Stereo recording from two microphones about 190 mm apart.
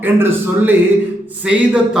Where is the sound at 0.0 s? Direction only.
10° right (ahead or behind).